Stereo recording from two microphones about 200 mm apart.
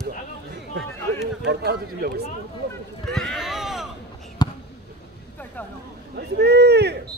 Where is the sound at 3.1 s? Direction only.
Centre (ahead or behind).